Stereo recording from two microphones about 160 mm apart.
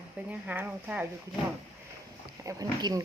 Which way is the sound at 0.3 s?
10° right (ahead or behind).